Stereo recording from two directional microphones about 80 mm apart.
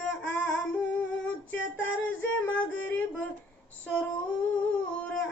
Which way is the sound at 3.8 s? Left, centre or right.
Centre.